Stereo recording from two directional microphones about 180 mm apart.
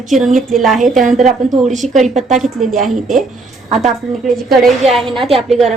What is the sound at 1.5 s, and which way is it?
Speech, 40° right (ahead or behind).